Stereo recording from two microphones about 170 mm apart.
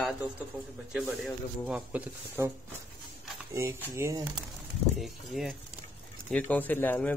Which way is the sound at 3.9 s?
20° right (ahead or behind).